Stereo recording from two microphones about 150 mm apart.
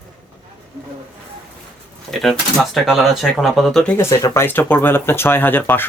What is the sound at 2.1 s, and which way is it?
Speech, centre (ahead or behind).